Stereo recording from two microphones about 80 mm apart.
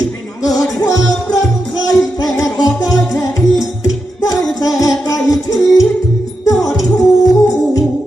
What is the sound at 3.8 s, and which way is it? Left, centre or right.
Music, left.